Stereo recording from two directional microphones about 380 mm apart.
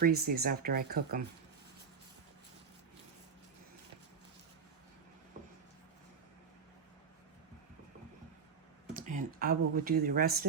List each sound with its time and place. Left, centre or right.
0.0 s speech: right
8.9 s speech: centre